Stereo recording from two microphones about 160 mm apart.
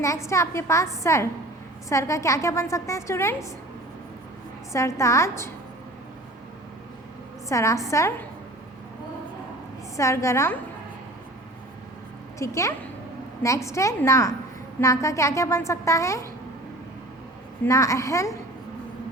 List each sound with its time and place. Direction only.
0.0 s a woman's voice: 20° left (ahead or behind)
4.7 s a woman's voice: 20° left (ahead or behind)
7.4 s a woman's voice: 20° left (ahead or behind)
10.0 s a woman's voice: 20° left (ahead or behind)
12.4 s a woman's voice: 20° left (ahead or behind)
17.7 s a woman's voice: 20° left (ahead or behind)